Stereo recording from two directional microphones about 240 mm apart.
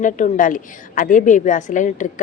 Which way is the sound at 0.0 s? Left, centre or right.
Left.